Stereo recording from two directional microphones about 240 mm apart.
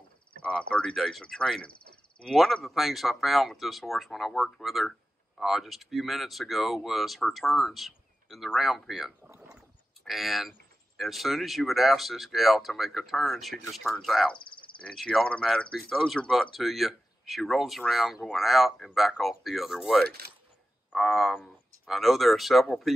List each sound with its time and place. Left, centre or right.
0.4 s speech: centre
14.4 s cricket: left
14.8 s speech: centre
20.1 s speech: right
20.9 s speech: centre